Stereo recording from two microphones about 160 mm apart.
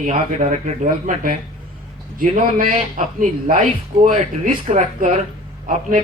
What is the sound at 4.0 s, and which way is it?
A man's voice, 55° right (ahead or behind).